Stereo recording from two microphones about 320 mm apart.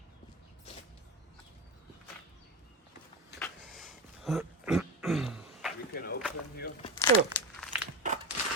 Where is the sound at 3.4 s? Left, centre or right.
Centre.